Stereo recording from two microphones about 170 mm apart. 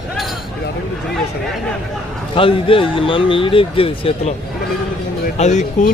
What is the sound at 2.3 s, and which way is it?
Speech, 30° left (ahead or behind).